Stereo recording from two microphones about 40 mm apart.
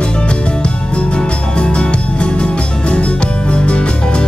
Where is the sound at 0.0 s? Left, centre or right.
Left.